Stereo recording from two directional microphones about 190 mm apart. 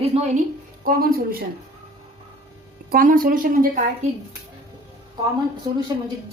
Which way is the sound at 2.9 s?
45° right (ahead or behind).